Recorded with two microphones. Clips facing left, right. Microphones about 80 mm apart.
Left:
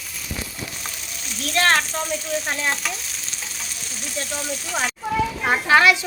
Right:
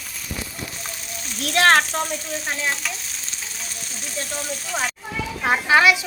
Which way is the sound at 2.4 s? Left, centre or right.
Centre.